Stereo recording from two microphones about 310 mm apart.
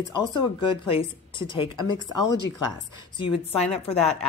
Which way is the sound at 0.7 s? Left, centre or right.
Centre.